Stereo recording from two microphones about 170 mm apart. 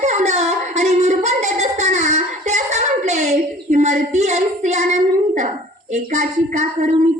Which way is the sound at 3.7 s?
45° right (ahead or behind).